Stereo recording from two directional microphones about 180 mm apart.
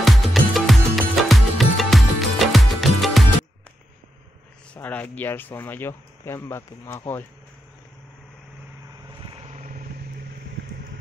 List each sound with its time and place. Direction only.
0.0 s music: centre (ahead or behind)
4.7 s speech: 10° left (ahead or behind)
9.2 s vehicle: 30° right (ahead or behind)